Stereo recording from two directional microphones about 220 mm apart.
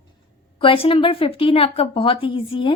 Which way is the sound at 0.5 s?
25° left (ahead or behind).